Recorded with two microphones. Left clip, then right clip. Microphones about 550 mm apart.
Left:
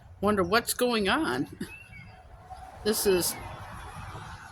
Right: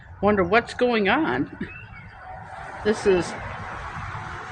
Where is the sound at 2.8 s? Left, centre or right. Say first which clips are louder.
Right 5 dB; left.